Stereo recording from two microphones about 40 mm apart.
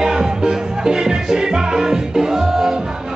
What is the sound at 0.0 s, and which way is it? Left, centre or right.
Music, centre.